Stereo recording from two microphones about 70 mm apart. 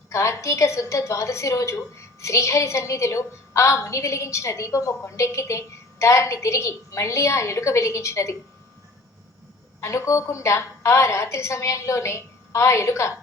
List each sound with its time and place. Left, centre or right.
0.1 s a woman's voice: left
9.8 s a woman's voice: left